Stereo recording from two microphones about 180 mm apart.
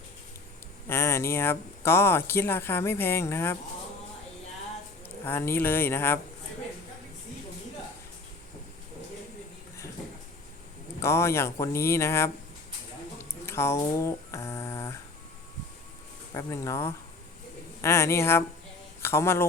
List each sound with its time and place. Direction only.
0.9 s speech: 15° left (ahead or behind)
5.0 s speech: 10° left (ahead or behind)
11.0 s speech: 15° left (ahead or behind)
13.4 s speech: 15° left (ahead or behind)
16.3 s speech: 15° left (ahead or behind)